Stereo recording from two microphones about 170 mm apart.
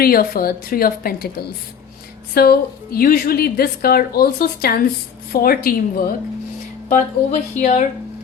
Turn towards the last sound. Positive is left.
turn(degrees=45)  # may be behind; listen again after turning